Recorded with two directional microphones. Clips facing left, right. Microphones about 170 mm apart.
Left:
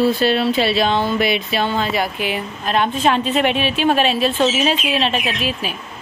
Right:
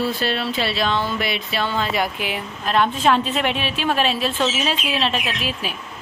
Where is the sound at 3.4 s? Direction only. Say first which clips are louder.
Left 5 dB; 65° left (ahead or behind).